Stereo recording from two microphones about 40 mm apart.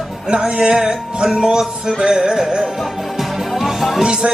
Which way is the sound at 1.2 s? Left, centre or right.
Centre.